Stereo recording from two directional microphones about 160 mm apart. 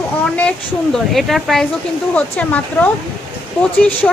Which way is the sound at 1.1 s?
Centre (ahead or behind).